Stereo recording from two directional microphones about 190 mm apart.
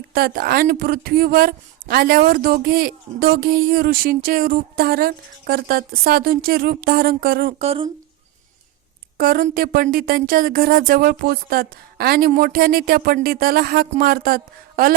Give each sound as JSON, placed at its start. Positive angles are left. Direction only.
{"t": 0.1, "sound": "speech", "side_deg": -50}
{"t": 7.6, "sound": "speech", "side_deg": -30}
{"t": 9.1, "sound": "speech", "side_deg": -50}